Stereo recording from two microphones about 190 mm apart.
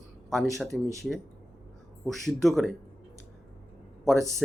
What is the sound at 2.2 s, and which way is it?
Speech, centre (ahead or behind).